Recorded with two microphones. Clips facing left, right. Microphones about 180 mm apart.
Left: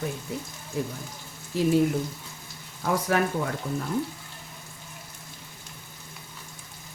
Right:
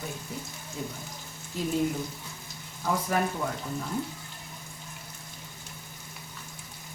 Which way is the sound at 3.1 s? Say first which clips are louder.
Left 3 dB; 80° left.